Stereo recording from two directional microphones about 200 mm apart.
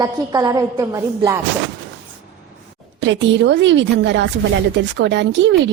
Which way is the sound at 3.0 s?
65° right (ahead or behind).